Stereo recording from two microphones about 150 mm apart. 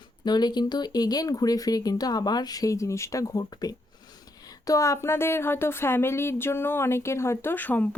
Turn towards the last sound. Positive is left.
turn(degrees=10)  # may be behind; listen again after turning